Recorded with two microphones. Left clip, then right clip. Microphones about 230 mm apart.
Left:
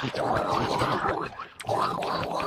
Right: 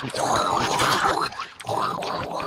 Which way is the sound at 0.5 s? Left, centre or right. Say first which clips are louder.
Right 4 dB; right.